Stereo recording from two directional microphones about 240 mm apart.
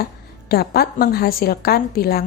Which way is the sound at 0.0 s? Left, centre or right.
Left.